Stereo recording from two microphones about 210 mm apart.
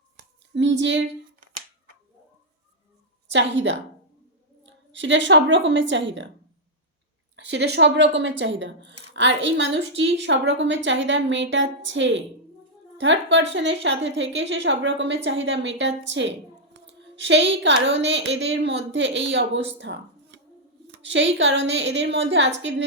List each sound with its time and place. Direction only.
0.5 s speech: 60° right (ahead or behind)
3.2 s a woman's voice: 60° right (ahead or behind)
7.3 s speech: 55° right (ahead or behind)
19.8 s a sound: 55° right (ahead or behind)
21.0 s speech: 60° right (ahead or behind)